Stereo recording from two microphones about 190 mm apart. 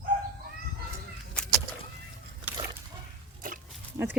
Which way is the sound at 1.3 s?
5° left (ahead or behind).